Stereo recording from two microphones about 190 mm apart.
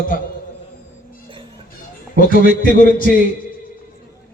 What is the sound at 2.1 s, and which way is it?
Speech, 50° left (ahead or behind).